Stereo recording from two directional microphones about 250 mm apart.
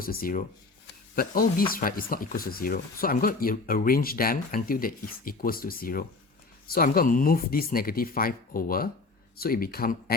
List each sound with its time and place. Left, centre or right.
0.0 s speech: left